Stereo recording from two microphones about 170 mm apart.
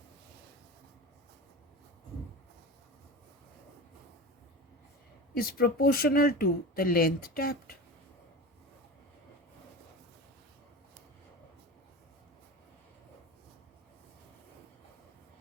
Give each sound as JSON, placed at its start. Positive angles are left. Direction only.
{"t": 5.3, "sound": "speech", "side_deg": 65}